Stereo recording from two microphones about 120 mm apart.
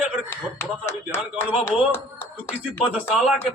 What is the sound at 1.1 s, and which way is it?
Speech, 20° left (ahead or behind).